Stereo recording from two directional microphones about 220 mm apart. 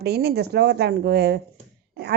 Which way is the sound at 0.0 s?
45° right (ahead or behind).